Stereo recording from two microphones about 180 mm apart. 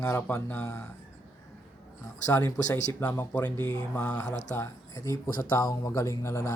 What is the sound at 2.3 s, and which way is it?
Speech, 10° left (ahead or behind).